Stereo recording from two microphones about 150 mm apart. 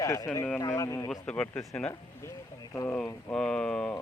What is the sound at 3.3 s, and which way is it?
Speech, 5° left (ahead or behind).